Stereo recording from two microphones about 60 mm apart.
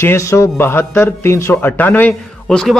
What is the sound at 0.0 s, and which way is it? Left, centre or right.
Speech, left.